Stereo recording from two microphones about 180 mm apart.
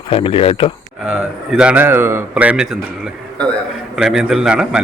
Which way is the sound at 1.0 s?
5° right (ahead or behind).